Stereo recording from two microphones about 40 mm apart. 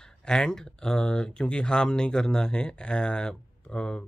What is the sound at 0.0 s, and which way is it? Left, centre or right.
Speech, centre.